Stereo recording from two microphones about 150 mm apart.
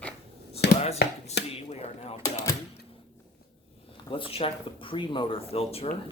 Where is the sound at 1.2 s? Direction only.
45° left (ahead or behind).